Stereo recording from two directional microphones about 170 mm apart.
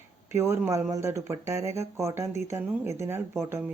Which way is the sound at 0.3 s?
15° right (ahead or behind).